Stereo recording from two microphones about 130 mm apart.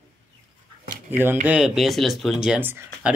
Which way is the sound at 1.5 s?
5° right (ahead or behind).